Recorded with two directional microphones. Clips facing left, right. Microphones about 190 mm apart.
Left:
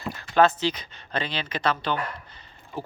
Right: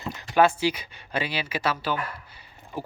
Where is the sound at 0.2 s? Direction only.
10° right (ahead or behind).